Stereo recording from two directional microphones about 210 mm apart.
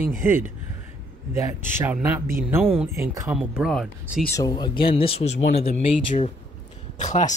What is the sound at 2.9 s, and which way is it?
Speech, 15° right (ahead or behind).